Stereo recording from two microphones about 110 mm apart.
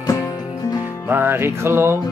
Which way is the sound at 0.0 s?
35° left (ahead or behind).